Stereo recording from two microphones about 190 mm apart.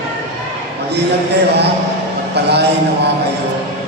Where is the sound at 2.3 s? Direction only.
60° right (ahead or behind).